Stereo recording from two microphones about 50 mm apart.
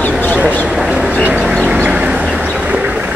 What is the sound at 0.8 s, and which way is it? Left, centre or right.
Vehicle, centre.